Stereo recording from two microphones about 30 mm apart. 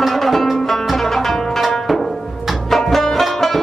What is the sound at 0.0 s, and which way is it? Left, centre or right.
Music, centre.